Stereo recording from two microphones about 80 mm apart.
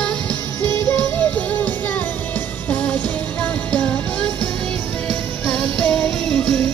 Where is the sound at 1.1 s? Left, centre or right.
Centre.